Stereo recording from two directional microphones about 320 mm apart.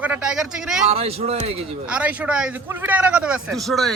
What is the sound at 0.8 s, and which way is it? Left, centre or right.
Speech, centre.